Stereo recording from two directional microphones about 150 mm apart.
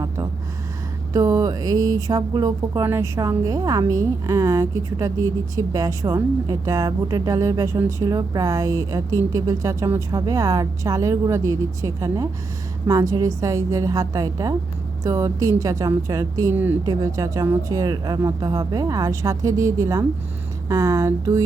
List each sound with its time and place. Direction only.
1.1 s a woman's voice: 25° right (ahead or behind)